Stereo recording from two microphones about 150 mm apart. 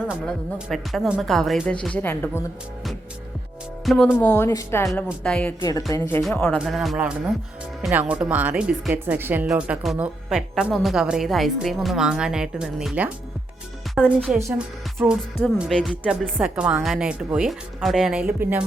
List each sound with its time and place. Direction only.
0.3 s speech: centre (ahead or behind)
3.8 s speech: centre (ahead or behind); by 4.9 s 20° left (ahead or behind)
5.2 s speech: 5° left (ahead or behind)
6.7 s speech: centre (ahead or behind)